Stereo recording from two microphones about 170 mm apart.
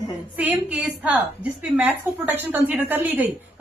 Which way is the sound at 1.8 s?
10° right (ahead or behind).